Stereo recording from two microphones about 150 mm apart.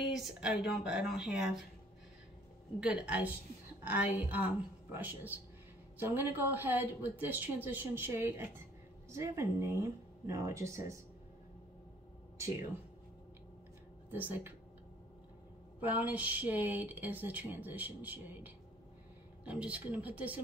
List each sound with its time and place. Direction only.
0.1 s speech: centre (ahead or behind)
2.8 s speech: 5° right (ahead or behind)
14.1 s speech: 10° right (ahead or behind)
15.8 s speech: 10° right (ahead or behind)